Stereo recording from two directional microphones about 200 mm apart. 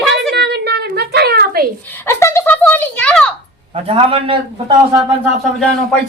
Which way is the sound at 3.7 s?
30° right (ahead or behind).